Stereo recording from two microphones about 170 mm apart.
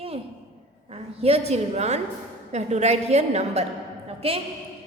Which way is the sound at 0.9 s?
35° right (ahead or behind).